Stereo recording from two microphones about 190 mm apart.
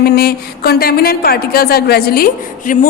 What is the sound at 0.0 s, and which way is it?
A woman's voice, 55° left (ahead or behind).